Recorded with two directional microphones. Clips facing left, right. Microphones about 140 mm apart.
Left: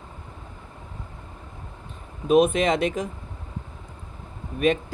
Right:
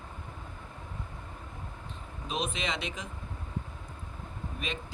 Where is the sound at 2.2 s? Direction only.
55° left (ahead or behind).